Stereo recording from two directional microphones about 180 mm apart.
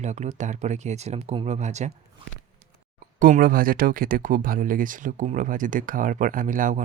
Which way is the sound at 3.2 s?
50° right (ahead or behind).